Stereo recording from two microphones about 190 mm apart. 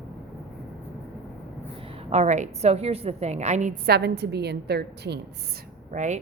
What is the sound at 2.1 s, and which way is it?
A woman's voice, 40° right (ahead or behind).